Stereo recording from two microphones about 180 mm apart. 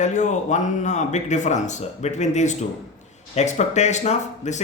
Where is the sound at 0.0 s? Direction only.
40° left (ahead or behind).